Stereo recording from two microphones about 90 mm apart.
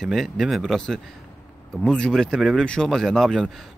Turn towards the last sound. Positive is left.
turn(degrees=5)  # may be behind; listen again after turning